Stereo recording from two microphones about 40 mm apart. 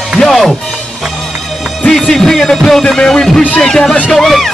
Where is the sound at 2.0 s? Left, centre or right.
Centre.